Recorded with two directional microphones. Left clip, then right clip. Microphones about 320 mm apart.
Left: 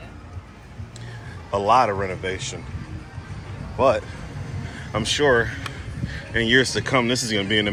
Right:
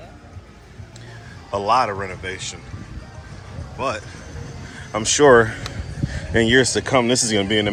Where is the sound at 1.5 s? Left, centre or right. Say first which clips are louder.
Left 1 dB; centre.